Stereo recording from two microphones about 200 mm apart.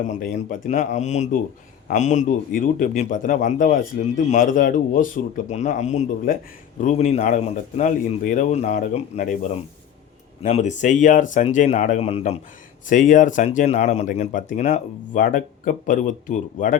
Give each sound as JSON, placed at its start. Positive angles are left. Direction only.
{"t": 0.0, "sound": "speech", "side_deg": 35}
{"t": 10.4, "sound": "speech", "side_deg": 35}